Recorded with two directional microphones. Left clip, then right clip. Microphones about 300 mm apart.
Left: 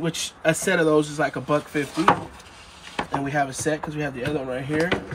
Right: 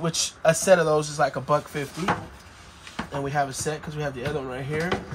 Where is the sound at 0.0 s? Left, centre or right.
Centre.